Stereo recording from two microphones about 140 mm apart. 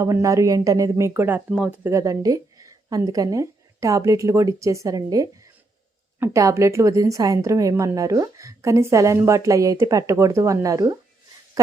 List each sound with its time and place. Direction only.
0.0 s speech: 20° right (ahead or behind)
1.9 s a woman's voice: 20° right (ahead or behind)